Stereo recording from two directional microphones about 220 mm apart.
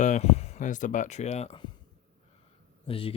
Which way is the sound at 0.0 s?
30° left (ahead or behind).